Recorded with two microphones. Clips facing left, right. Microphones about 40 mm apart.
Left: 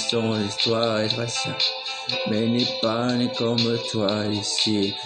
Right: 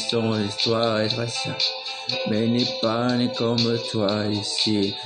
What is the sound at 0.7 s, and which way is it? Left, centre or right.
Speech, centre.